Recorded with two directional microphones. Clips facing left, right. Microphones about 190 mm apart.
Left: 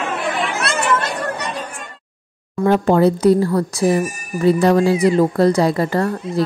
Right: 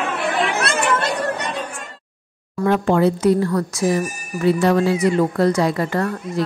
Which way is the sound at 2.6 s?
35° left (ahead or behind).